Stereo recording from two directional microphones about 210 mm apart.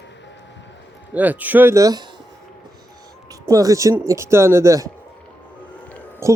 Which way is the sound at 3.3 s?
15° right (ahead or behind).